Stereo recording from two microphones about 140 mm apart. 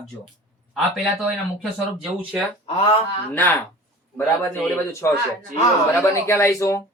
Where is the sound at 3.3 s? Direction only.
15° left (ahead or behind).